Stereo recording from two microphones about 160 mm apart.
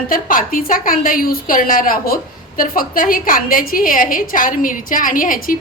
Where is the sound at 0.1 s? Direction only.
60° left (ahead or behind).